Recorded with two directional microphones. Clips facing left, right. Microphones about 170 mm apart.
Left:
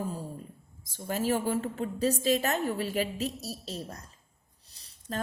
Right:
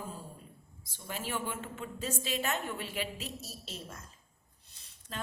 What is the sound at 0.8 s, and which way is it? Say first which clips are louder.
A woman's voice: left 10 dB; 45° left (ahead or behind).